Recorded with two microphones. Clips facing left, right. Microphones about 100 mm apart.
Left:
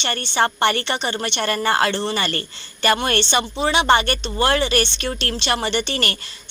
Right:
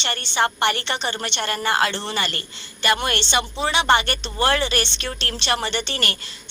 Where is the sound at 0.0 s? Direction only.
45° left (ahead or behind).